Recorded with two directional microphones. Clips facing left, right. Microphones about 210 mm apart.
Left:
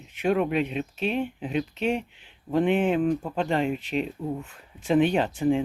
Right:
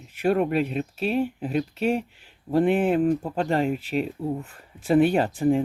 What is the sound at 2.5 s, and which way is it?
Speech, 5° right (ahead or behind).